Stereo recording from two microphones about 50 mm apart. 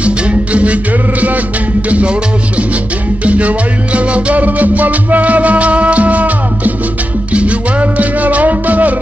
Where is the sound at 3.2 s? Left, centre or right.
Right.